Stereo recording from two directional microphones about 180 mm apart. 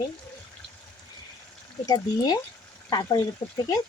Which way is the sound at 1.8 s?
20° left (ahead or behind).